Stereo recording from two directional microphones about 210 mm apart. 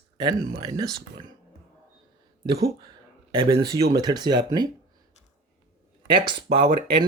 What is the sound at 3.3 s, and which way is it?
Speech, 25° right (ahead or behind).